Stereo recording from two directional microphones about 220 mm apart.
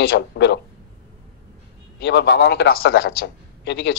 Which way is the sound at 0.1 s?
50° left (ahead or behind).